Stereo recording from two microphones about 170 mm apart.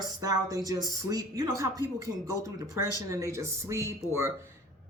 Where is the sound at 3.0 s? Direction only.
20° right (ahead or behind).